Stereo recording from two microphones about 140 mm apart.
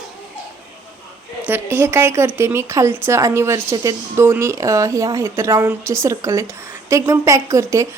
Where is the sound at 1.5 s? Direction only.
15° right (ahead or behind).